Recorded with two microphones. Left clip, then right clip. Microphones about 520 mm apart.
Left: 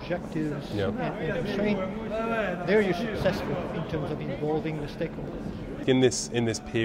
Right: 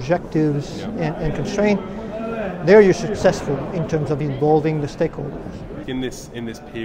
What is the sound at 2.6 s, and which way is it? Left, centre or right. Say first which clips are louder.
A man's voice: right 15 dB; right.